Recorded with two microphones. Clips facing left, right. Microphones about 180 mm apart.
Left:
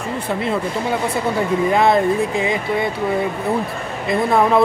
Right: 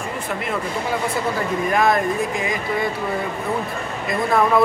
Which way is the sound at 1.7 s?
25° left (ahead or behind).